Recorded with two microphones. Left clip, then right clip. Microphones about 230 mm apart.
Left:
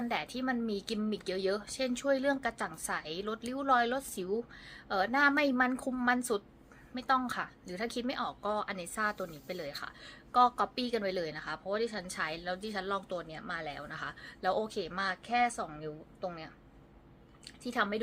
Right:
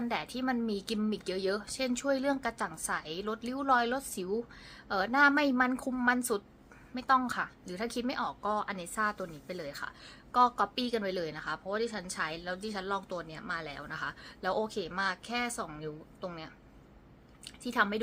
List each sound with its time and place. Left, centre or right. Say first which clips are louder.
0.0 s a woman's voice: right 1 dB; centre